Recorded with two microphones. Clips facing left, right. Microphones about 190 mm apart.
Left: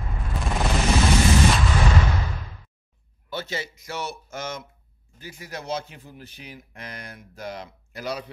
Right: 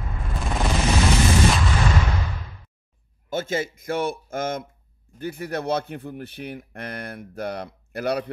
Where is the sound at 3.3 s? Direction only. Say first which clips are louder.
Right 6 dB; 50° right (ahead or behind).